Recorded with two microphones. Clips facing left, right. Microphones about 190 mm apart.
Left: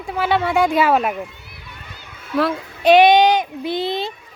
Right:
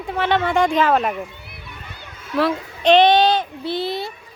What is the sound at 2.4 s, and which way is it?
A child's voice, 5° left (ahead or behind).